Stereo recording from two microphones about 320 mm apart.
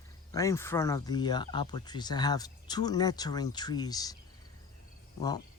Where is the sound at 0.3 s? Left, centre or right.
Centre.